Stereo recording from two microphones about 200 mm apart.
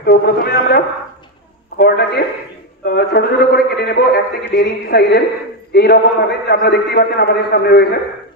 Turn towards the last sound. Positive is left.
turn(degrees=55)  # may be behind; listen again after turning